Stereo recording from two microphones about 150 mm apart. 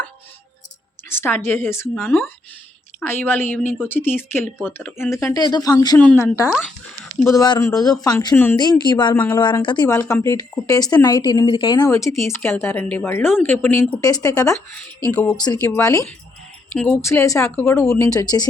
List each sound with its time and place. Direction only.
1.1 s a woman's voice: 15° left (ahead or behind)
6.5 s speech: centre (ahead or behind)
7.3 s speech: 25° left (ahead or behind)
8.3 s a woman's voice: 10° left (ahead or behind)
8.8 s speech: 30° left (ahead or behind)
9.9 s speech: 20° left (ahead or behind)
15.1 s a woman's voice: 10° left (ahead or behind)
15.8 s speech: 20° left (ahead or behind)
16.7 s speech: centre (ahead or behind)
17.0 s speech: 20° left (ahead or behind)